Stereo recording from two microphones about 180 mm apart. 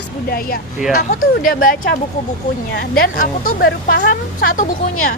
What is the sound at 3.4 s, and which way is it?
Speech, 55° left (ahead or behind).